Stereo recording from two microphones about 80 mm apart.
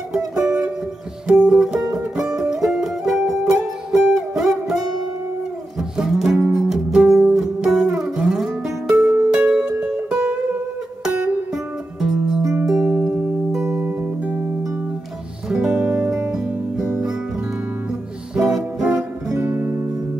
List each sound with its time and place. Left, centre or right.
1.2 s music: centre
11.5 s music: centre
15.5 s music: centre
18.4 s music: centre
19.2 s music: right
19.5 s music: right